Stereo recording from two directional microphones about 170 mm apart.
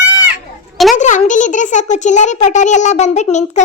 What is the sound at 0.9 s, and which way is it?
A child's voice, 45° left (ahead or behind).